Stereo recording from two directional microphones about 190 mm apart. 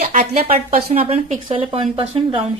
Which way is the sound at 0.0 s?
40° right (ahead or behind).